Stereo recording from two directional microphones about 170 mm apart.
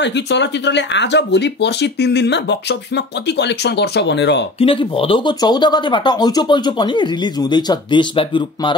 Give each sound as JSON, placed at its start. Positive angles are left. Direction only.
{"t": 0.0, "sound": "speech", "side_deg": 90}
{"t": 4.6, "sound": "speech", "side_deg": 30}